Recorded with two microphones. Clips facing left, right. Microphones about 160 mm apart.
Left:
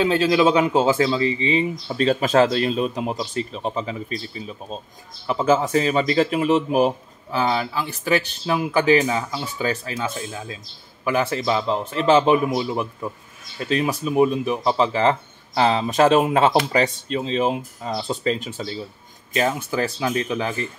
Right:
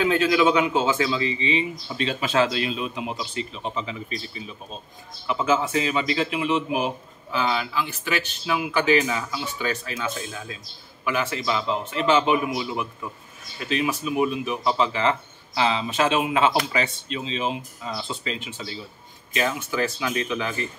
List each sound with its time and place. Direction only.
0.0 s speech: 30° left (ahead or behind)
5.2 s speech: 35° left (ahead or behind)